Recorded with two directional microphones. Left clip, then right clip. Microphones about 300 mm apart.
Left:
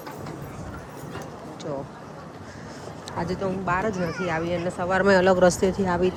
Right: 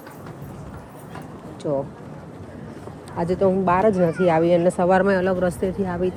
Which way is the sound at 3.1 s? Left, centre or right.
Centre.